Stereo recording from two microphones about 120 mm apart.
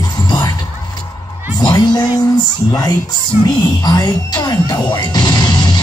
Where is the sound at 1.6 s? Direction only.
35° left (ahead or behind).